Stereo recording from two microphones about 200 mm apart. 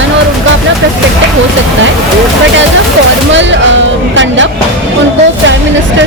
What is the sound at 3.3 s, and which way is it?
Music, 65° right (ahead or behind).